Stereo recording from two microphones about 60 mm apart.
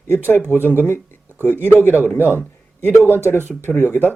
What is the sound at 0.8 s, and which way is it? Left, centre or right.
Speech, left.